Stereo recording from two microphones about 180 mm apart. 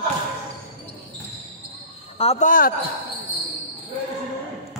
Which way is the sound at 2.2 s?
35° left (ahead or behind).